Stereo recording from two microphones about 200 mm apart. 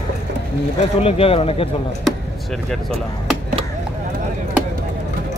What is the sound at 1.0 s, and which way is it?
Speech, 30° left (ahead or behind).